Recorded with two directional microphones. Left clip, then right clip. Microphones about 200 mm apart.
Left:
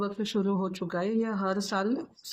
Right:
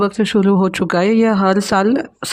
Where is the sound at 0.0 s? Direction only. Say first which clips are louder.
Right 15 dB; 45° right (ahead or behind).